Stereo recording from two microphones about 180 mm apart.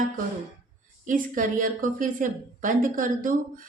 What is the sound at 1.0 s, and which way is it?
A woman's voice, 45° right (ahead or behind).